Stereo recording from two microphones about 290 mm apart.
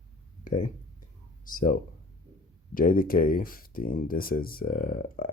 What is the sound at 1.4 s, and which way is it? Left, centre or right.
Speech, left.